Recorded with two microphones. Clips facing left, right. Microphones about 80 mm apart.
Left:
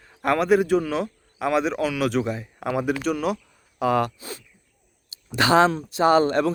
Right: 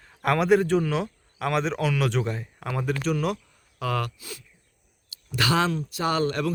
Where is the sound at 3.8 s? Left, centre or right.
Left.